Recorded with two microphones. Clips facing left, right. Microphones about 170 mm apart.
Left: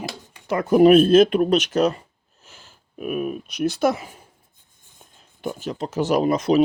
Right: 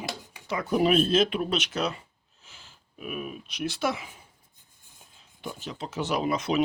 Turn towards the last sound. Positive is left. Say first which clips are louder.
# left 8 dB
turn(degrees=40)  # may be behind; listen again after turning